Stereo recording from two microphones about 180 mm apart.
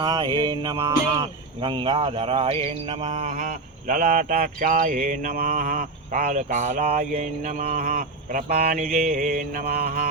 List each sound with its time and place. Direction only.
0.0 s speech: 25° right (ahead or behind); by 10.1 s 55° right (ahead or behind)